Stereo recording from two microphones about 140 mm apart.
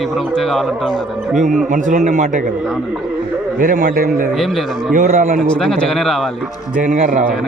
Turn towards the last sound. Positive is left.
turn(degrees=-65)  # may be behind; listen again after turning